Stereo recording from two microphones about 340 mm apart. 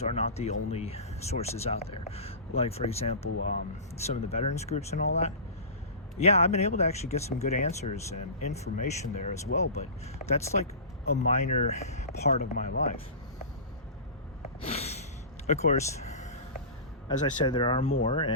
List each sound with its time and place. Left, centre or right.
0.0 s speech: centre
14.6 s a sound: centre
17.1 s speech: centre